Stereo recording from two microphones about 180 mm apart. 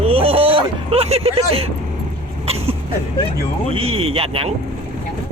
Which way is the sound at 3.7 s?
35° right (ahead or behind).